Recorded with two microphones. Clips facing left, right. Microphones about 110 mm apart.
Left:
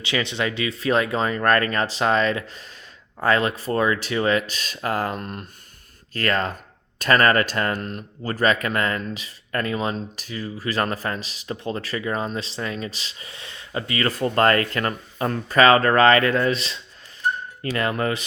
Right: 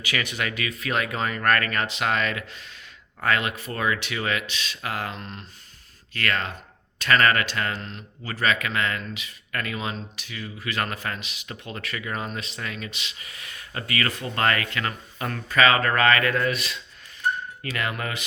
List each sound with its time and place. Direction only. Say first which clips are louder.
0.0 s speech: left 4 dB; 25° left (ahead or behind); by 5.5 s 50° left (ahead or behind)
6.1 s speech: left 4 dB; 40° left (ahead or behind)
14.2 s speech: left 9 dB; 40° left (ahead or behind)